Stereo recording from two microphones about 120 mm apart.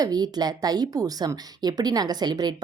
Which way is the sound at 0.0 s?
35° right (ahead or behind).